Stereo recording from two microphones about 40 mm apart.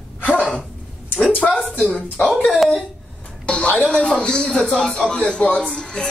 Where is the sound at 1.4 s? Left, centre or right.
Centre.